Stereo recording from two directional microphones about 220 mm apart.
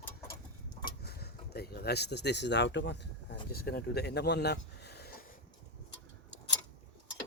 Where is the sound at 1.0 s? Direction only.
45° left (ahead or behind).